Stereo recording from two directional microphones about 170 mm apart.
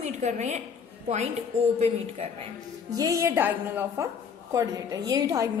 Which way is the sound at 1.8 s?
35° right (ahead or behind).